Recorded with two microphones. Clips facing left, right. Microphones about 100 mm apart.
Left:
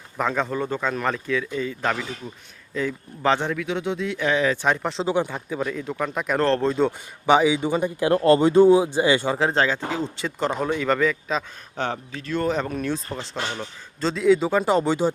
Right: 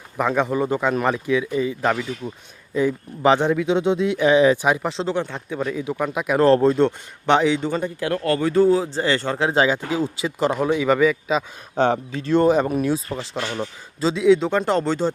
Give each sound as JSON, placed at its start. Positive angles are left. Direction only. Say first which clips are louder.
{"t": 0.2, "sound": "speech", "louder": "right 4 dB", "side_deg": -10}
{"t": 5.0, "sound": "speech", "louder": "left 1 dB", "side_deg": 10}
{"t": 9.5, "sound": "speech", "louder": "right 3 dB", "side_deg": -10}
{"t": 11.8, "sound": "speech", "louder": "right 8 dB", "side_deg": -25}
{"t": 13.3, "sound": "speech", "louder": "right 1 dB", "side_deg": 20}
{"t": 14.0, "sound": "speech", "louder": "right 2 dB", "side_deg": 0}